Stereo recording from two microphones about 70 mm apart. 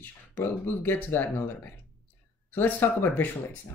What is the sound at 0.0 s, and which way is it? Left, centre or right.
Speech, left.